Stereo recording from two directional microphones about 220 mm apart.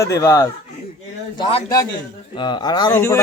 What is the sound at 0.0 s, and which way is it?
A man's voice, 15° left (ahead or behind).